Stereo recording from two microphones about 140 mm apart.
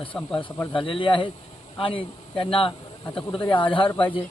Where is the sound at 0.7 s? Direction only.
35° left (ahead or behind).